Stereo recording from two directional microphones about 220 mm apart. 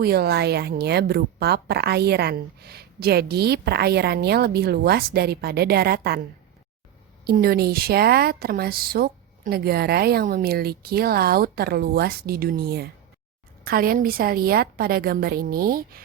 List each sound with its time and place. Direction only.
0.0 s a woman's voice: 45° right (ahead or behind)
7.3 s a woman's voice: 45° right (ahead or behind)